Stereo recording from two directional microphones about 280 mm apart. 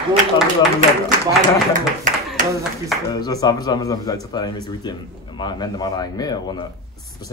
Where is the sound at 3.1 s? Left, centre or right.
Centre.